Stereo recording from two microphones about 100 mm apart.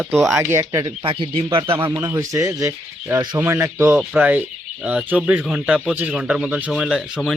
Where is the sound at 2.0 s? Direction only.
35° right (ahead or behind).